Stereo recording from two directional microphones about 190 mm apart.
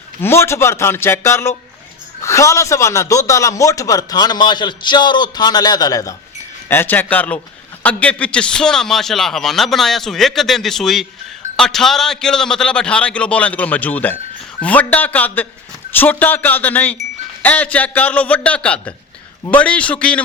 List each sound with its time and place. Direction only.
0.2 s a man's voice: 15° left (ahead or behind)